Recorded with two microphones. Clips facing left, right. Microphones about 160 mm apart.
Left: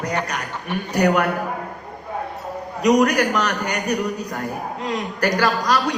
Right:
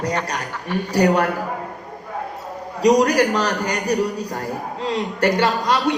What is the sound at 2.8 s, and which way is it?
A man's voice, 30° right (ahead or behind).